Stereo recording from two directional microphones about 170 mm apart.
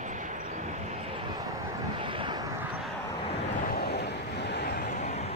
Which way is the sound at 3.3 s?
75° left (ahead or behind).